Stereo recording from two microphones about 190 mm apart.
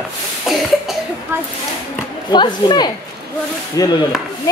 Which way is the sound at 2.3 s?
20° left (ahead or behind).